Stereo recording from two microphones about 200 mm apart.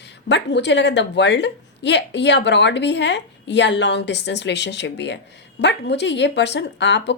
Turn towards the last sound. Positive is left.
turn(degrees=60)  # may be behind; listen again after turning